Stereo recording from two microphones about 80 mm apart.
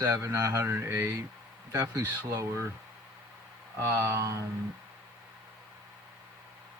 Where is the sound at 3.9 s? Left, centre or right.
Right.